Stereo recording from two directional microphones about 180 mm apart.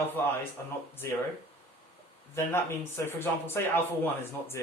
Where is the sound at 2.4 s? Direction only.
15° left (ahead or behind).